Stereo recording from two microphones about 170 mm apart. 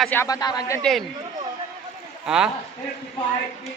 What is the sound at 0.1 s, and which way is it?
Speech, 15° left (ahead or behind).